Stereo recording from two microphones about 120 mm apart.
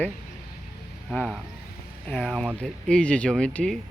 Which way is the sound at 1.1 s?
10° left (ahead or behind).